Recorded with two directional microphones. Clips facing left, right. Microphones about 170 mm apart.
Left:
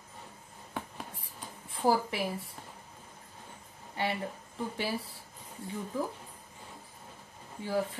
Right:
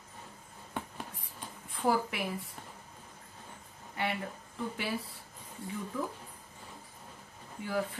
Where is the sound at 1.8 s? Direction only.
30° left (ahead or behind).